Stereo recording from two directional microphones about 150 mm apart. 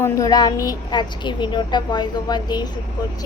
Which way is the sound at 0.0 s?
25° left (ahead or behind).